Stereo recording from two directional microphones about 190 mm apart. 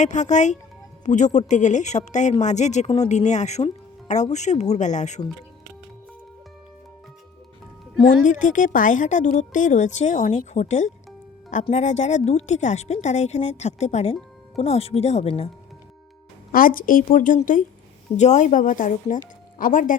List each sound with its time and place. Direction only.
0.0 s a woman's voice: 40° left (ahead or behind)
8.2 s a woman's voice: 40° left (ahead or behind)
16.5 s speech: 50° left (ahead or behind)